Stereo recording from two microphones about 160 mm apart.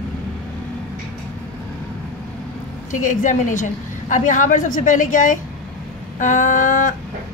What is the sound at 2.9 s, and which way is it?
A woman's voice, 50° left (ahead or behind).